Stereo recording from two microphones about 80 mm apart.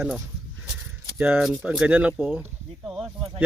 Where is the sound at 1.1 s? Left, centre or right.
Right.